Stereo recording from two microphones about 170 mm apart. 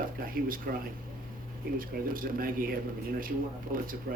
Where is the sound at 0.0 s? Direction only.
55° right (ahead or behind).